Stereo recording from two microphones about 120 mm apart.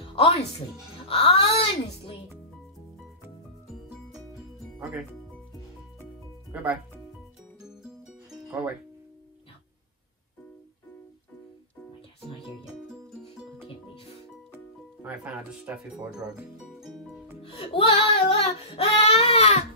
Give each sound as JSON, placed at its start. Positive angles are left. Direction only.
{"t": 0.1, "sound": "music", "side_deg": 50}
{"t": 1.0, "sound": "speech", "side_deg": 50}
{"t": 6.5, "sound": "speech", "side_deg": -10}
{"t": 8.5, "sound": "speech", "side_deg": -15}
{"t": 14.5, "sound": "music", "side_deg": -15}
{"t": 16.6, "sound": "music", "side_deg": 0}
{"t": 17.4, "sound": "music", "side_deg": 50}